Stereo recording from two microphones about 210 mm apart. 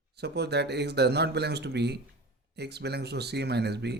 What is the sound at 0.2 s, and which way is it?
Speech, 50° right (ahead or behind).